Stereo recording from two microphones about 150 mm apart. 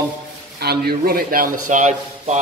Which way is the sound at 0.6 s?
90° right.